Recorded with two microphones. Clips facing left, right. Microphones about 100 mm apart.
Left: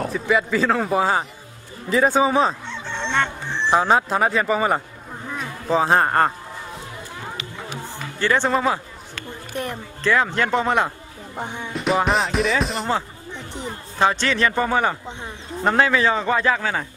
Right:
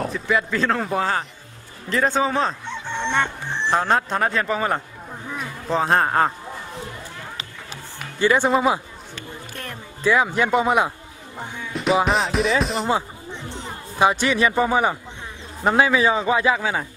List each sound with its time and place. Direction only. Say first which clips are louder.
0.0 s a man's voice: left 2 dB; centre (ahead or behind)
2.6 s fowl: right 2 dB; 15° right (ahead or behind)
3.7 s speech: left 3 dB; 10° left (ahead or behind)
8.2 s a man's voice: right 2 dB; 10° right (ahead or behind)
9.5 s music: left 10 dB; 20° left (ahead or behind)
10.0 s a man's voice: right 1 dB; 10° right (ahead or behind)
11.3 s speech: left 3 dB; 20° left (ahead or behind)
11.7 s speech: right 1 dB; centre (ahead or behind)
13.7 s a man's voice: right 1 dB; 10° right (ahead or behind)